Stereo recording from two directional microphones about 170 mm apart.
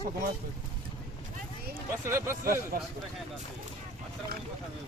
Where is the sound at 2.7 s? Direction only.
55° right (ahead or behind).